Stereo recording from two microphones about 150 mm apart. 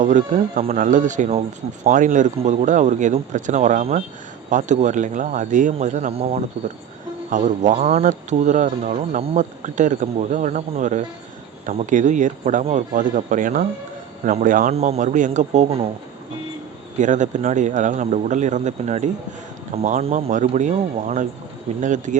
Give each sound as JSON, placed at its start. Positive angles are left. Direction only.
{"t": 0.0, "sound": "speech", "side_deg": -55}
{"t": 6.1, "sound": "speech", "side_deg": -40}
{"t": 7.3, "sound": "speech", "side_deg": -55}
{"t": 14.7, "sound": "speech", "side_deg": -50}
{"t": 17.0, "sound": "speech", "side_deg": -55}